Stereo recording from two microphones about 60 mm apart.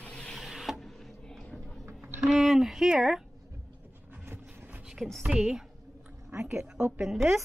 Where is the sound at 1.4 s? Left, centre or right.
Centre.